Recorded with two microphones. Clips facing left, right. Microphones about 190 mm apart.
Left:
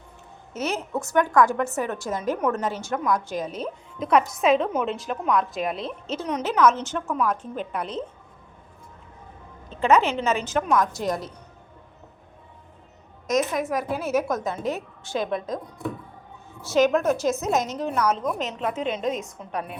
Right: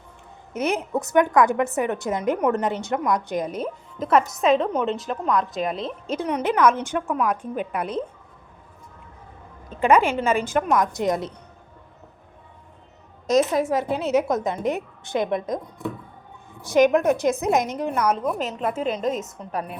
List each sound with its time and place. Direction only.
0.5 s a woman's voice: 15° right (ahead or behind); by 5.9 s centre (ahead or behind)
6.2 s a woman's voice: 10° right (ahead or behind)
9.6 s a woman's voice: 10° right (ahead or behind)
11.0 s speech: 20° right (ahead or behind)
13.2 s a woman's voice: 30° right (ahead or behind); by 19.7 s centre (ahead or behind)